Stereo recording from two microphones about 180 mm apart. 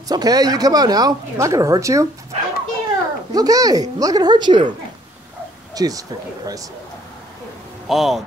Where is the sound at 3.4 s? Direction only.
20° right (ahead or behind).